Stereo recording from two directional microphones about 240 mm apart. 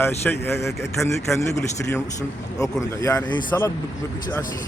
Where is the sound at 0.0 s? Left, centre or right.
Centre.